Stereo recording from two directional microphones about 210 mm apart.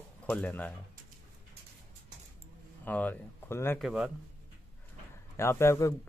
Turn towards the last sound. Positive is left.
turn(degrees=15)  # may be behind; listen again after turning